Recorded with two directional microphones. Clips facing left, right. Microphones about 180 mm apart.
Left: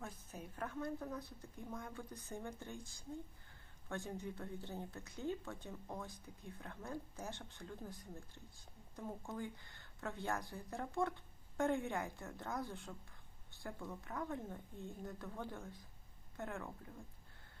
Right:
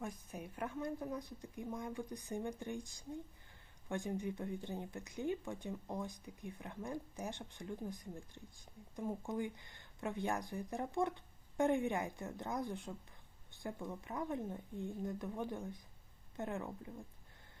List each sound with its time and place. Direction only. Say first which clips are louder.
0.0 s speech: right 5 dB; 15° right (ahead or behind)